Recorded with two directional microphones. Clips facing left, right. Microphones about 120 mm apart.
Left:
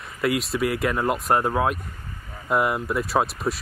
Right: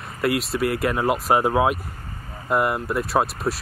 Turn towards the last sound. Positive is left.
turn(degrees=0)  # may be behind; listen again after turning